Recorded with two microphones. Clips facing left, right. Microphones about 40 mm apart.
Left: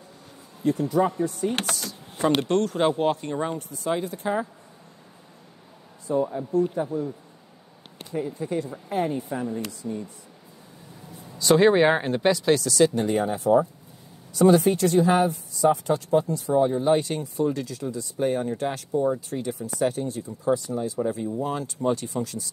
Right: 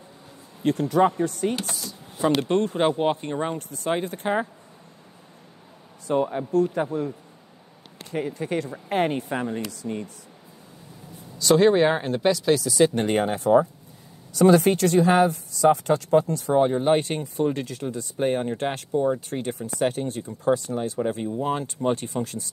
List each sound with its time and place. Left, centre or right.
0.7 s a woman's voice: right
1.5 s speech: left
2.4 s speech: right
3.5 s speech: right
6.0 s a woman's voice: right
11.3 s speech: centre
12.9 s speech: right
19.1 s speech: right